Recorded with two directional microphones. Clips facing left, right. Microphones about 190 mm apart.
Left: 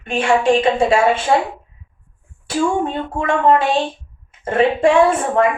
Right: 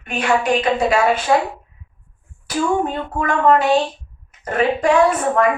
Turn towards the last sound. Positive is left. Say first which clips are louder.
# left 1 dB
turn(degrees=25)  # may be behind; listen again after turning